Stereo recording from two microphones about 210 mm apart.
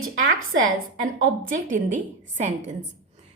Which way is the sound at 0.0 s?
75° right (ahead or behind).